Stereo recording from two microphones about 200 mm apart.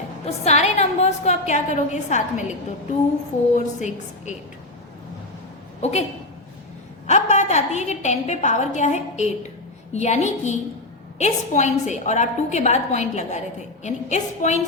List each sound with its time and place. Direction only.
0.3 s a woman's voice: 35° left (ahead or behind)
3.5 s a woman's voice: 35° left (ahead or behind)
5.8 s a woman's voice: 35° left (ahead or behind)
7.1 s a woman's voice: 35° left (ahead or behind)